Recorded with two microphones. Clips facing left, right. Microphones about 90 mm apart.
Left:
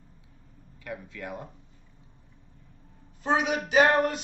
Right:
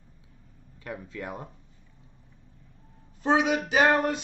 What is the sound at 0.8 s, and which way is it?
Speech, 30° right (ahead or behind).